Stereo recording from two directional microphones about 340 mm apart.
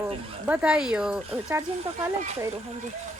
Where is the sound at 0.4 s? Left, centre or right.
Centre.